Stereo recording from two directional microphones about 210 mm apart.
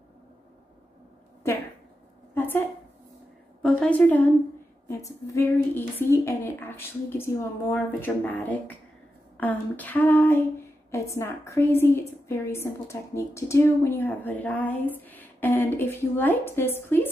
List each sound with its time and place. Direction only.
1.5 s a woman's voice: 10° left (ahead or behind)
2.3 s a sound: 10° left (ahead or behind)
3.6 s a woman's voice: 5° left (ahead or behind)